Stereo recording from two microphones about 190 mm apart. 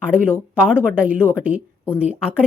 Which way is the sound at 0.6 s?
5° right (ahead or behind).